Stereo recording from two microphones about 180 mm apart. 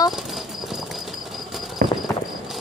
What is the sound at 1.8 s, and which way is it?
Clip-clop, 50° right (ahead or behind).